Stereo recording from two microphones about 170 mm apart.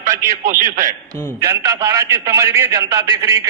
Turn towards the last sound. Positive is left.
turn(degrees=-15)  # may be behind; listen again after turning